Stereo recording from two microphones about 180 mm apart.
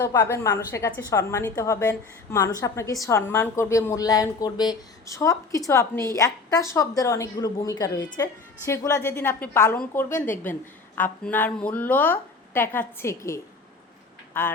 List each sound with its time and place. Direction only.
0.0 s a woman's voice: 15° left (ahead or behind)